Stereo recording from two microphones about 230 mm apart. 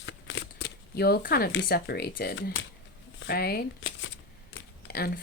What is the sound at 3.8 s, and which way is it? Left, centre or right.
Speech, left.